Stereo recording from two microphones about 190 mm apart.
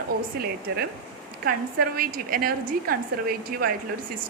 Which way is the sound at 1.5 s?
50° right (ahead or behind).